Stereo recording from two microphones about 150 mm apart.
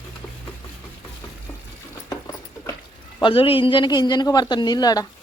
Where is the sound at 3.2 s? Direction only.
35° left (ahead or behind).